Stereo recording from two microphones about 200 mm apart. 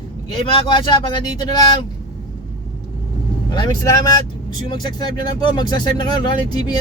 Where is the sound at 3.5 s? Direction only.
20° left (ahead or behind).